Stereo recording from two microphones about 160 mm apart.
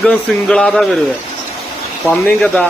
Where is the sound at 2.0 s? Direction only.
Centre (ahead or behind).